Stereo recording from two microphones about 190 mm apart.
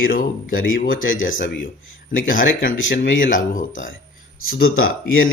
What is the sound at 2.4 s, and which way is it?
Speech, 90° left.